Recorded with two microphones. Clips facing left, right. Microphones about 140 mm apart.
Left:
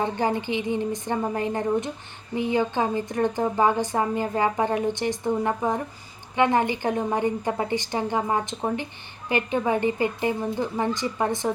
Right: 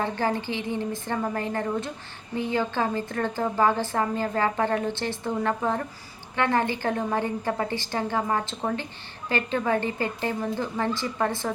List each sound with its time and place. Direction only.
0.0 s a woman's voice: 15° left (ahead or behind)